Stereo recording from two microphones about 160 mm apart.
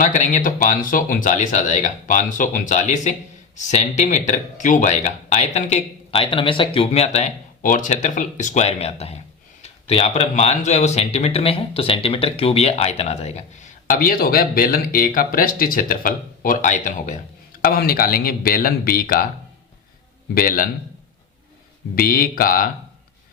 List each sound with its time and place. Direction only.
0.0 s speech: 55° left (ahead or behind)
20.3 s speech: 65° left (ahead or behind)
21.9 s speech: 65° left (ahead or behind)